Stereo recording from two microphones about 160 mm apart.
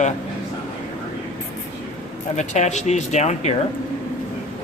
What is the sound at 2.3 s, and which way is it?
Speech, 45° left (ahead or behind).